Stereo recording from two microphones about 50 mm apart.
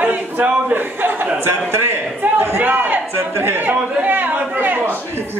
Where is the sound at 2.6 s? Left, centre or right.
Right.